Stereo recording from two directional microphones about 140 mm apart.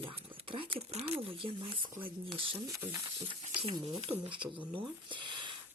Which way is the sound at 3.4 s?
40° right (ahead or behind).